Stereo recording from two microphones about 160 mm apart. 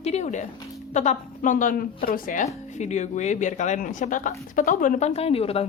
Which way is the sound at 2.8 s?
45° left (ahead or behind).